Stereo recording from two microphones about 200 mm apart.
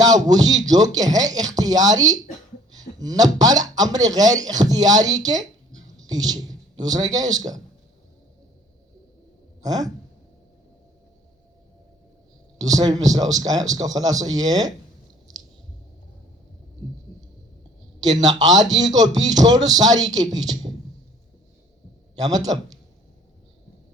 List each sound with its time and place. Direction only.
0.0 s speech: 20° right (ahead or behind)
9.6 s speech: 20° right (ahead or behind)
12.5 s speech: 20° right (ahead or behind)
18.2 s speech: 20° right (ahead or behind)
22.2 s speech: 20° right (ahead or behind)